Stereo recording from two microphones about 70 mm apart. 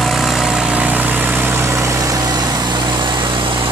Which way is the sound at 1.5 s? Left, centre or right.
Right.